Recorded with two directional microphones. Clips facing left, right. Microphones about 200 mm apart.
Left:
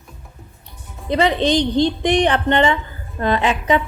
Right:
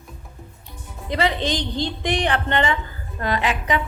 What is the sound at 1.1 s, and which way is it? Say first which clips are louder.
A woman's voice: left 6 dB; 20° left (ahead or behind).